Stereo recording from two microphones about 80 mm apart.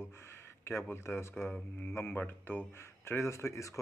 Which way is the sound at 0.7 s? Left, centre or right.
Left.